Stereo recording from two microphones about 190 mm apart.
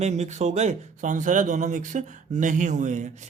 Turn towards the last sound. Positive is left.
turn(degrees=-40)  # may be behind; listen again after turning